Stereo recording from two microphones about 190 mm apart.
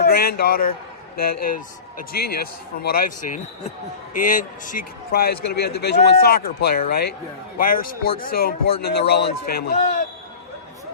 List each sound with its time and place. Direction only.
0.0 s a man's voice: 55° left (ahead or behind)